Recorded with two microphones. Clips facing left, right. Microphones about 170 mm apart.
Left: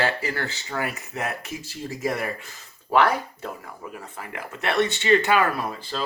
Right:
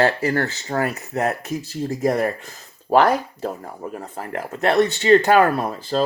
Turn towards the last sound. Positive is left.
turn(degrees=-40)  # may be behind; listen again after turning